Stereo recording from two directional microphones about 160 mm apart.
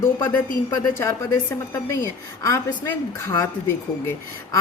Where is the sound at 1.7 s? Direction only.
20° left (ahead or behind).